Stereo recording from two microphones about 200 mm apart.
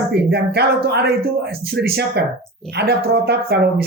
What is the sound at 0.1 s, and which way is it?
Speech, 55° right (ahead or behind).